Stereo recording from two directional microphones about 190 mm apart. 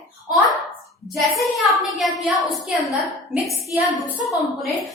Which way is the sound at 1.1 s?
Centre (ahead or behind).